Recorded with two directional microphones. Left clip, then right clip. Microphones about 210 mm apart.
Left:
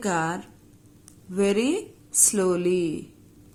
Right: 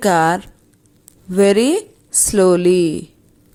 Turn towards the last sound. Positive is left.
turn(degrees=-30)  # may be behind; listen again after turning